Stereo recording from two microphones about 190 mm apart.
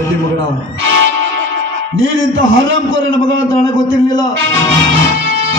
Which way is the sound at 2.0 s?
90° right.